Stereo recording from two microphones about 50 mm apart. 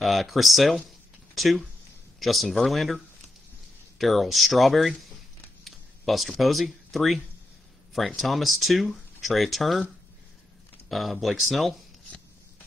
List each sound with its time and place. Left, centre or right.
0.0 s speech: centre
4.0 s speech: centre
5.6 s a sound: centre
8.2 s speech: centre
10.9 s speech: centre